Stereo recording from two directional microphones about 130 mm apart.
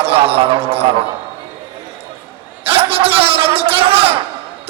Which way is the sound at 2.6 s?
45° right (ahead or behind).